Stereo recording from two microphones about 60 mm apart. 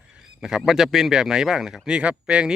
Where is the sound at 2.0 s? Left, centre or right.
Centre.